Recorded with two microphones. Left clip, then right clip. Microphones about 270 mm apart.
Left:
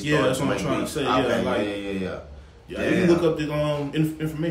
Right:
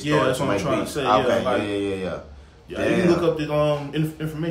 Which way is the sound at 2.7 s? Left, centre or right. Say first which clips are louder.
Right 1 dB; centre.